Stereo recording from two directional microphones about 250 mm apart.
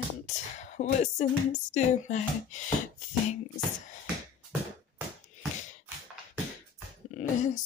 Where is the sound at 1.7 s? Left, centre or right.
Left.